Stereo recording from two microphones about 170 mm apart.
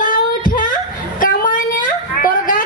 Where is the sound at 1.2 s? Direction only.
55° left (ahead or behind).